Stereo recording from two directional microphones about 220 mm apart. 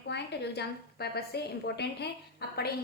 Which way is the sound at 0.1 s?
50° left (ahead or behind).